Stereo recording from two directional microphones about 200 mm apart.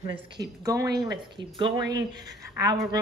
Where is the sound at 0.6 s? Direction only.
15° right (ahead or behind).